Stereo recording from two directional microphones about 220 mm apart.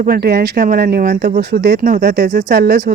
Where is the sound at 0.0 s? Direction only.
45° right (ahead or behind).